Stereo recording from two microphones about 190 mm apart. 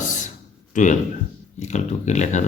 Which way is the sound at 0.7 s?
40° left (ahead or behind).